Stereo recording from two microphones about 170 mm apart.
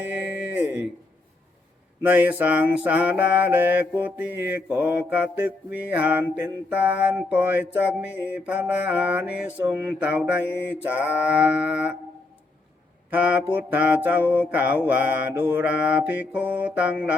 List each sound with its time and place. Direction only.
0.5 s a sound: 10° right (ahead or behind)
2.0 s mantra: 10° right (ahead or behind)
13.1 s mantra: 10° right (ahead or behind)